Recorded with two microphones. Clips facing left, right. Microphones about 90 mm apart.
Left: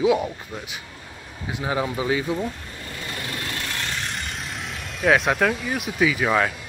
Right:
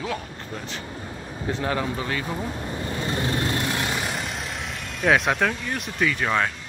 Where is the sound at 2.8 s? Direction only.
30° right (ahead or behind).